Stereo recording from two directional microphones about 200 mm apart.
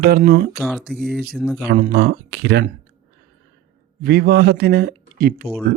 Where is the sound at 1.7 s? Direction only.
50° right (ahead or behind).